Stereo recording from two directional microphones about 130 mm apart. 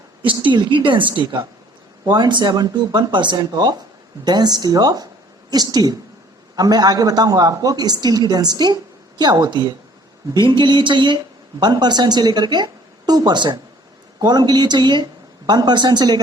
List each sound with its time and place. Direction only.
0.2 s a woman's voice: 40° right (ahead or behind)